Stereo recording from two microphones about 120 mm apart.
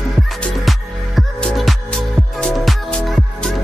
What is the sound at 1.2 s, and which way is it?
Music, 5° left (ahead or behind).